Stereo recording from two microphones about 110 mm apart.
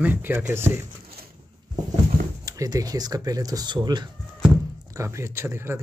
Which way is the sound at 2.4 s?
30° right (ahead or behind).